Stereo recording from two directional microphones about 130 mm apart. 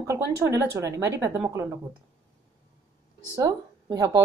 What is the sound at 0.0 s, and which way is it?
Speech, 25° right (ahead or behind).